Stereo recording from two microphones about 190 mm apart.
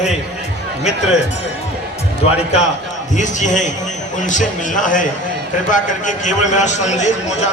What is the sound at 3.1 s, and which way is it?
A man's voice, 40° left (ahead or behind).